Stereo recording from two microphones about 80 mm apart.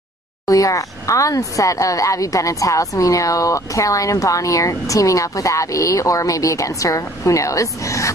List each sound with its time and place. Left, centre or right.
0.5 s speech: left